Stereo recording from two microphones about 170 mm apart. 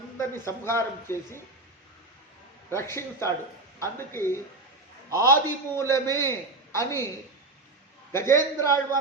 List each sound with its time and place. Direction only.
0.2 s speech: 15° left (ahead or behind)
2.6 s speech: 15° left (ahead or behind)
8.1 s speech: 15° left (ahead or behind)